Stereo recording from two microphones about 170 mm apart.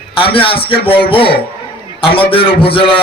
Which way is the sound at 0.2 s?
30° left (ahead or behind).